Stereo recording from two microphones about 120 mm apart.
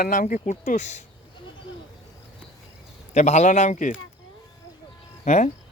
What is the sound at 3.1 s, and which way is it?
Speech, 75° left (ahead or behind).